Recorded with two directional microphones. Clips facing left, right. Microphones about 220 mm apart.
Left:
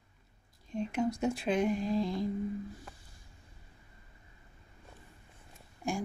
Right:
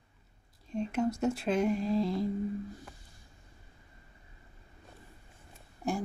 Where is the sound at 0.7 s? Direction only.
5° right (ahead or behind).